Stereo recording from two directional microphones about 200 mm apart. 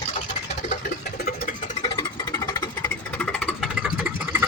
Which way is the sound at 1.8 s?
20° left (ahead or behind).